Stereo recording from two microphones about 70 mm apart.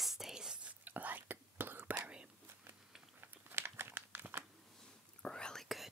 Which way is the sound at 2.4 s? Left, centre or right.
Right.